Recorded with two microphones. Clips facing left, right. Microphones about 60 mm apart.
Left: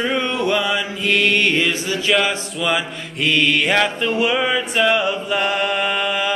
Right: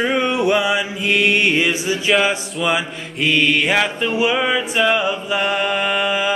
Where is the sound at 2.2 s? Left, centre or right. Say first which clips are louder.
Right 2 dB; centre.